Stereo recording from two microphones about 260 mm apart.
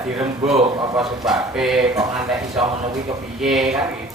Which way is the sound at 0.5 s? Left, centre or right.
Centre.